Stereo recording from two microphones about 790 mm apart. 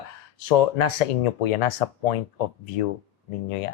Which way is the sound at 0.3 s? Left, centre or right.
Left.